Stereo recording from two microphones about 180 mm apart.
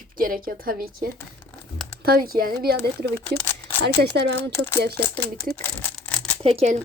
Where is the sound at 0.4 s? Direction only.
55° right (ahead or behind).